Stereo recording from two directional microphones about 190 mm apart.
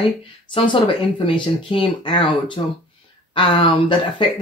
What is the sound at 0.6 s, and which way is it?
Speech, 25° left (ahead or behind).